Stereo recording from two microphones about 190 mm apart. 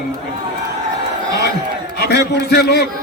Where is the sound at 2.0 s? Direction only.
60° left (ahead or behind).